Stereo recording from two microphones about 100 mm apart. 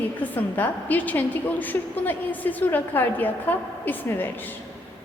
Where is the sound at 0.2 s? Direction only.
15° left (ahead or behind).